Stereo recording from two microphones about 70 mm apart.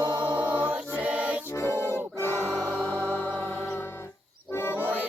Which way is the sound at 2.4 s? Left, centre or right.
Right.